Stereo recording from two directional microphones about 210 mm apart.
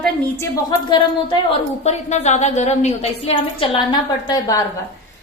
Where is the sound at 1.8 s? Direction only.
30° left (ahead or behind).